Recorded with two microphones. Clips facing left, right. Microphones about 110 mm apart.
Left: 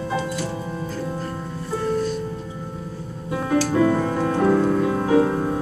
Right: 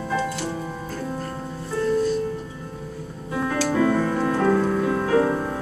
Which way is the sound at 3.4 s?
20° left (ahead or behind).